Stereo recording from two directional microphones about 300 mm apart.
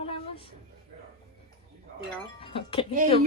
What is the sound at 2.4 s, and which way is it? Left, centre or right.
Speech, centre.